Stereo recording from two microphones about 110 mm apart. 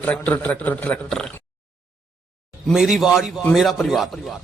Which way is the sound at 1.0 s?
5° left (ahead or behind).